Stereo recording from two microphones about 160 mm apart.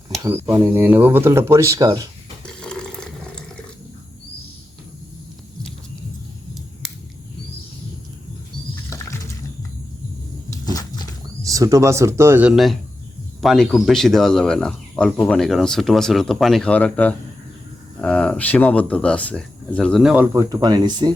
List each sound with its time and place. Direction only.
0.2 s speech: 15° right (ahead or behind)
2.6 s water: 5° left (ahead or behind)
10.5 s a sound: 25° left (ahead or behind)
11.4 s speech: 20° right (ahead or behind)